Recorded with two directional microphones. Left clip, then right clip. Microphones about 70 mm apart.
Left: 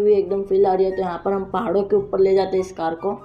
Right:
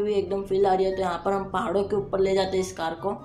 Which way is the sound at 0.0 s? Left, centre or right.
Left.